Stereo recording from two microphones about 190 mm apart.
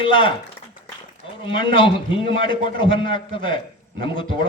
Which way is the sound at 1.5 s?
25° left (ahead or behind).